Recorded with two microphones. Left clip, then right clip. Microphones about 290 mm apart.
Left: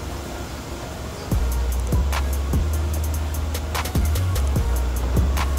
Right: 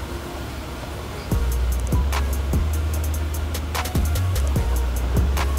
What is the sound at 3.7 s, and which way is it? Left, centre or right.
Music, centre.